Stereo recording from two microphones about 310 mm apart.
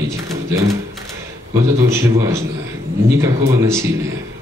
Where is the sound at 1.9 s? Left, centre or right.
Centre.